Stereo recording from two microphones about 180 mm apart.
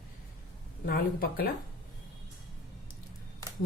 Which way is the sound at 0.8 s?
55° left (ahead or behind).